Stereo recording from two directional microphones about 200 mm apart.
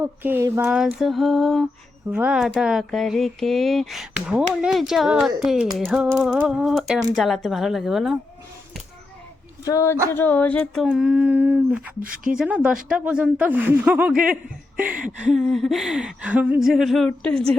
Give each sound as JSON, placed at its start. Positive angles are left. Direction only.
{"t": 0.0, "sound": "humming", "side_deg": -10}
{"t": 0.8, "sound": "speech", "side_deg": 0}
{"t": 9.6, "sound": "speech", "side_deg": 15}
{"t": 10.8, "sound": "humming", "side_deg": -5}
{"t": 11.9, "sound": "speech", "side_deg": -45}
{"t": 12.4, "sound": "speech", "side_deg": -5}